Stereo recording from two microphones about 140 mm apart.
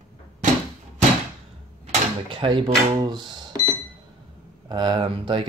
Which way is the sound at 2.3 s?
35° right (ahead or behind).